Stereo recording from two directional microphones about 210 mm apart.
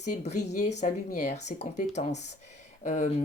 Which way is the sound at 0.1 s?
35° left (ahead or behind).